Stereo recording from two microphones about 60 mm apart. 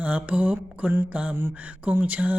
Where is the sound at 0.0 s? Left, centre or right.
Right.